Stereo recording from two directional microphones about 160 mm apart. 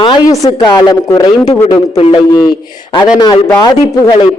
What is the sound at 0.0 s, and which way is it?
Speech, 25° left (ahead or behind).